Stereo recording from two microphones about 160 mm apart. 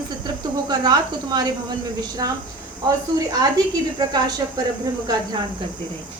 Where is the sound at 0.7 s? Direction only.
25° right (ahead or behind).